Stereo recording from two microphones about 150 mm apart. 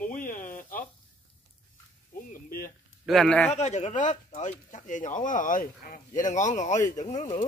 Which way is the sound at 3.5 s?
50° left (ahead or behind).